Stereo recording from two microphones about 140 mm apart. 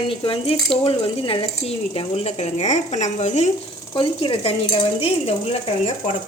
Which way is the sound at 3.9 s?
40° left (ahead or behind).